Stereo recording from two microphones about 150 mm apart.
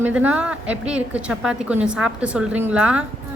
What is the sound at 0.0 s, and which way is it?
A woman's voice, 10° right (ahead or behind).